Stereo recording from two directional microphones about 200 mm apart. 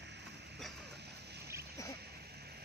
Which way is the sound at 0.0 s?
60° right (ahead or behind).